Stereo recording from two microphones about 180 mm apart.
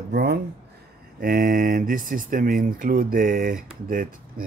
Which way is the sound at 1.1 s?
50° right (ahead or behind).